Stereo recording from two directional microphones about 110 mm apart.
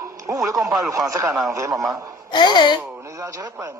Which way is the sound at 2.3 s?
40° left (ahead or behind).